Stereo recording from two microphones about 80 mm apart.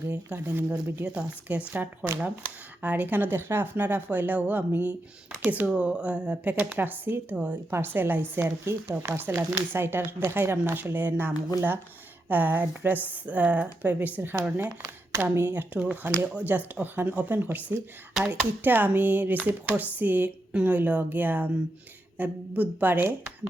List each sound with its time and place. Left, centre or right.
0.0 s speech: right
1.0 s speech: centre